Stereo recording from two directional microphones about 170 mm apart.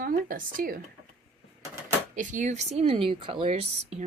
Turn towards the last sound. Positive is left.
turn(degrees=-40)  # may be behind; listen again after turning